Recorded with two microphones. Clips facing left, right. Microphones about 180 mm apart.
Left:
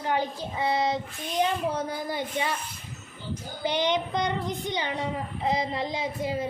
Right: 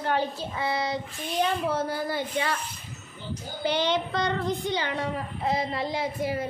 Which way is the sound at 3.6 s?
15° left (ahead or behind).